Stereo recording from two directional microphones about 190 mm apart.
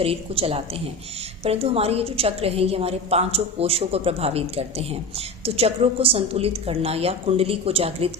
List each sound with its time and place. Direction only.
0.0 s a woman's voice: 30° right (ahead or behind)